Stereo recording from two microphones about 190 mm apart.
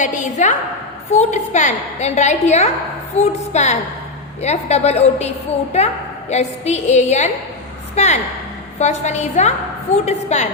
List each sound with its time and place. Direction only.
0.0 s a woman's voice: 40° left (ahead or behind)
6.3 s a woman's voice: 35° left (ahead or behind)